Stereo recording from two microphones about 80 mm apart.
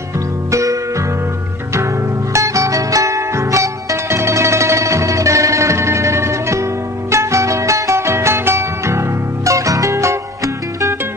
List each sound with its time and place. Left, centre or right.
0.5 s music: right
2.3 s music: right